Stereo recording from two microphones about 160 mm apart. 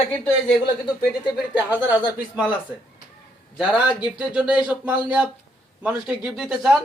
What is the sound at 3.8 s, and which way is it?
Speech, 30° left (ahead or behind).